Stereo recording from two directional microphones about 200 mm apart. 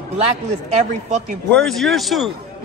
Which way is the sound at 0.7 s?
35° right (ahead or behind).